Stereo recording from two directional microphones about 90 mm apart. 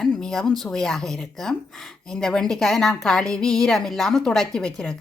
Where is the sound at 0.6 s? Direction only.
5° left (ahead or behind).